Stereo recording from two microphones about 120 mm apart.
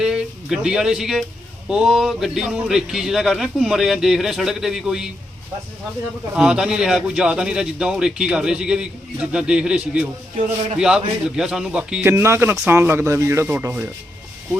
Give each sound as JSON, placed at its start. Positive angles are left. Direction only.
{"t": 0.0, "sound": "speech", "side_deg": -5}
{"t": 6.3, "sound": "a man's voice", "side_deg": -5}